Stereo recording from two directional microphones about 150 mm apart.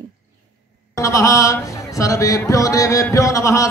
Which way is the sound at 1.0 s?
20° left (ahead or behind).